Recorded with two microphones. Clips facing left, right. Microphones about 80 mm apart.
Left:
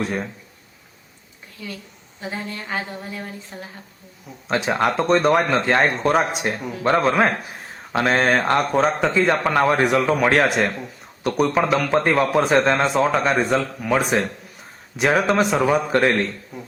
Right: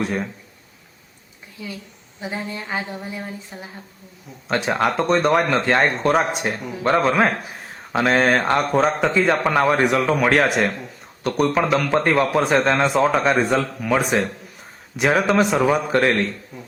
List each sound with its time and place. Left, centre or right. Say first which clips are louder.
0.0 s speech: right 1 dB; centre
2.2 s speech: right 1 dB; centre
4.4 s speech: even; centre
16.5 s beatboxing: left 2 dB; centre